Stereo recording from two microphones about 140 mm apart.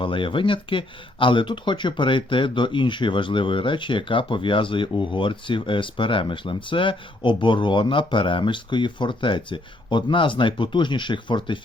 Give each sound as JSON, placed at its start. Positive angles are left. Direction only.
{"t": 0.0, "sound": "speech", "side_deg": 35}